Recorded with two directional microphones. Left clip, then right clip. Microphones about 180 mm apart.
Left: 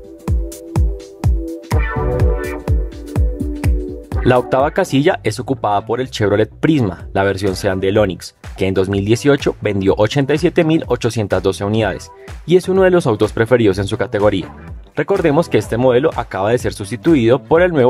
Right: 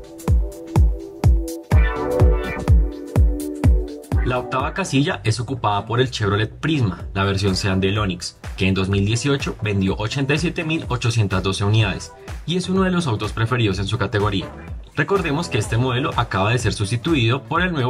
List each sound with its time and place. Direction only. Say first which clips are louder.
0.2 s music: left 1 dB; centre (ahead or behind)
4.3 s speech: left 10 dB; 45° left (ahead or behind)